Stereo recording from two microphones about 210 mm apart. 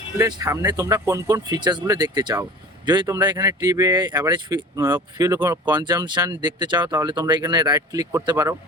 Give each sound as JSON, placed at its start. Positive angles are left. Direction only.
{"t": 0.2, "sound": "speech", "side_deg": -20}